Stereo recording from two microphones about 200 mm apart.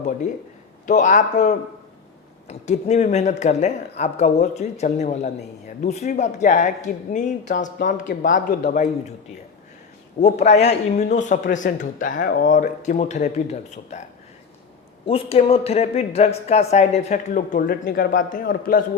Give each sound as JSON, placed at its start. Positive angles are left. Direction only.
{"t": 0.9, "sound": "speech", "side_deg": 40}
{"t": 10.2, "sound": "speech", "side_deg": 35}